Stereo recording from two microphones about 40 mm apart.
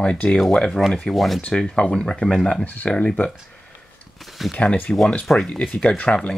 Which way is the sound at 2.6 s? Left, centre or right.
Left.